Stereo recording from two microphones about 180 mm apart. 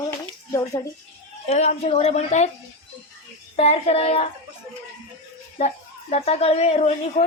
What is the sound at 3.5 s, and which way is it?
Speech, 35° left (ahead or behind).